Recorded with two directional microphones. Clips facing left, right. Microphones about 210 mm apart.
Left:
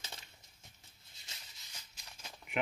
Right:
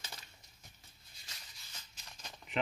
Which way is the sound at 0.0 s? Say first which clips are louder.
Even; 25° left (ahead or behind).